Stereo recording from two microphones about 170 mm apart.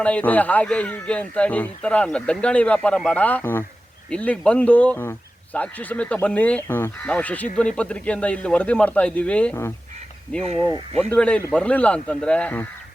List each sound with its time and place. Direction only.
0.0 s speech: 10° left (ahead or behind)